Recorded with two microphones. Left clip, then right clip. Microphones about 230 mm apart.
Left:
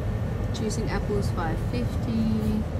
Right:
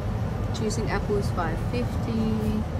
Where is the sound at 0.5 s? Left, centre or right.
Centre.